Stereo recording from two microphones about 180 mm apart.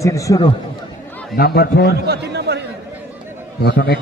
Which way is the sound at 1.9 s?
65° right (ahead or behind).